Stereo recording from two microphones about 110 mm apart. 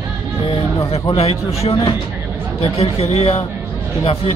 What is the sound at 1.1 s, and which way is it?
Speech, 65° left (ahead or behind).